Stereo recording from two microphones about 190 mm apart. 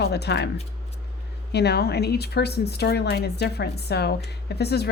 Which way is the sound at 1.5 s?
60° left (ahead or behind).